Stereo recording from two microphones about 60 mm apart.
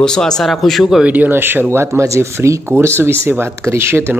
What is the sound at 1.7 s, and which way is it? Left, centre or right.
Speech, right.